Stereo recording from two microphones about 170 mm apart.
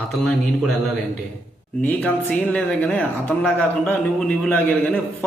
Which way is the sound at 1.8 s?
10° left (ahead or behind).